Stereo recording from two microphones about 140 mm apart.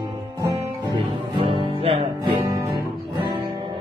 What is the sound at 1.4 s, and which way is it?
Music, 40° right (ahead or behind).